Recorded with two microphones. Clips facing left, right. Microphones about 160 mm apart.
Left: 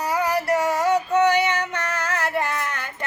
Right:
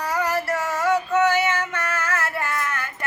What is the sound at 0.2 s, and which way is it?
Female singing, 15° left (ahead or behind).